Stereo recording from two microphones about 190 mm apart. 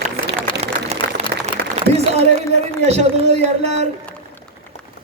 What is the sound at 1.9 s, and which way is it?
A man's voice, 35° right (ahead or behind).